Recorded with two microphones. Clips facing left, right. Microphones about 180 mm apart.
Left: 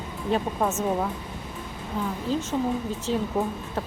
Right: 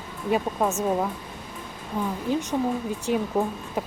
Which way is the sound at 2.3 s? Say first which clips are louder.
Right 1 dB; 15° right (ahead or behind).